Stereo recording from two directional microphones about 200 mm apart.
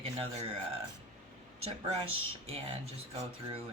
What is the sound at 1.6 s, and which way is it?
Speech, 30° right (ahead or behind).